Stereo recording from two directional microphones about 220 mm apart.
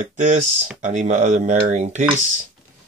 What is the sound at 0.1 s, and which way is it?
Speech, 35° right (ahead or behind).